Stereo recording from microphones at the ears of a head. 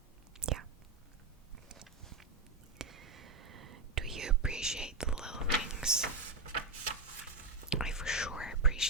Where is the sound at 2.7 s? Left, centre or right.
Right.